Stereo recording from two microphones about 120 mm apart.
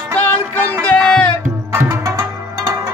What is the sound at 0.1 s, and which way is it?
Music, 15° left (ahead or behind).